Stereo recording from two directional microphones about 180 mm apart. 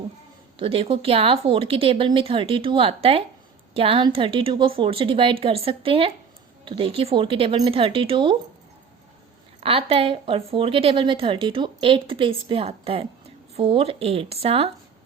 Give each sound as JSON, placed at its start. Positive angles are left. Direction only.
{"t": 0.6, "sound": "speech", "side_deg": -30}
{"t": 9.6, "sound": "a sound", "side_deg": -30}
{"t": 9.9, "sound": "a woman's voice", "side_deg": -30}